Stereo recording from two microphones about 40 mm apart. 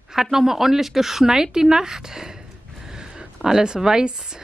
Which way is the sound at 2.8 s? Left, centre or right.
Centre.